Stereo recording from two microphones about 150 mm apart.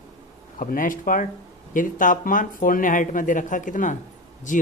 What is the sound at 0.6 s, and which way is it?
A man's voice, 65° left (ahead or behind).